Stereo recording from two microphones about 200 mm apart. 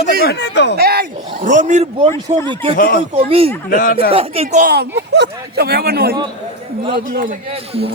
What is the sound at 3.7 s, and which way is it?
Speech, 45° left (ahead or behind).